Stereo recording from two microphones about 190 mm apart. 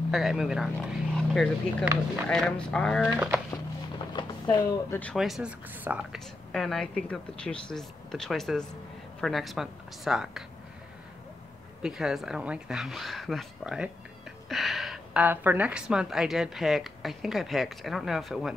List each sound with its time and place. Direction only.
0.1 s speech: centre (ahead or behind)
4.1 s a sound: 25° left (ahead or behind)
4.6 s speech: 10° left (ahead or behind)
5.1 s speech: centre (ahead or behind)
11.8 s speech: 5° right (ahead or behind)